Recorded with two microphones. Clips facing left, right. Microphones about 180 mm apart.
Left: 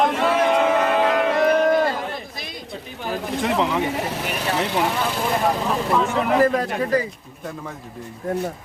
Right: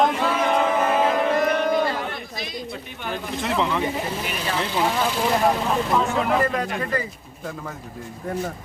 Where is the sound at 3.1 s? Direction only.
Centre (ahead or behind).